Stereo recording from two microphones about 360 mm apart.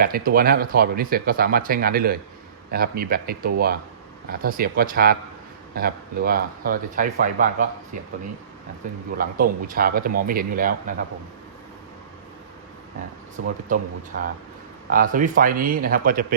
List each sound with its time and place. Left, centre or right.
0.0 s speech: right
9.1 s speech: right
13.7 s speech: right
14.8 s speech: right